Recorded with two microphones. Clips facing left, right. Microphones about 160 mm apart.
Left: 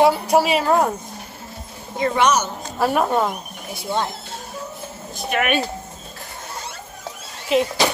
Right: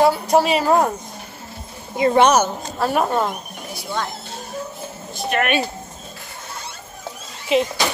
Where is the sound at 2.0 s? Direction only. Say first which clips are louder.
Right 4 dB; 30° right (ahead or behind).